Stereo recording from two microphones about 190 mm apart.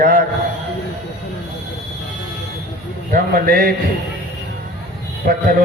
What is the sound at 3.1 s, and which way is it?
Speech, 50° right (ahead or behind).